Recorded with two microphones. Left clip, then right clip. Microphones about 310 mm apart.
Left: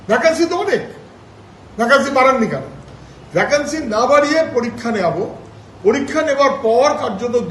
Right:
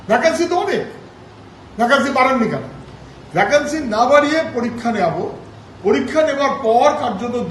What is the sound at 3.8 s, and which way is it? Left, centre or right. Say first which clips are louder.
A man's voice: left 1 dB; centre.